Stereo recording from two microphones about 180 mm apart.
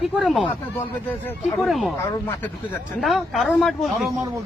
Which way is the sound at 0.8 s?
10° left (ahead or behind).